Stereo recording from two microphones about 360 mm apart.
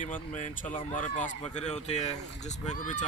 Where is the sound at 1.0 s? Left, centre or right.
Left.